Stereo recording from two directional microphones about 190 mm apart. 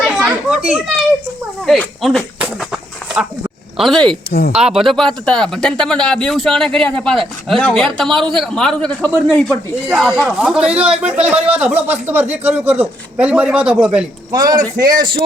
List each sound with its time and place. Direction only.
0.2 s a child's voice: 5° right (ahead or behind)
3.8 s speech: centre (ahead or behind)
4.3 s speech: 55° left (ahead or behind)
4.5 s a man's voice: 5° right (ahead or behind)
14.3 s speech: 20° right (ahead or behind)